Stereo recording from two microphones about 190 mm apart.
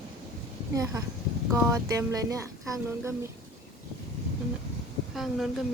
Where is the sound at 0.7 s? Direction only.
15° right (ahead or behind).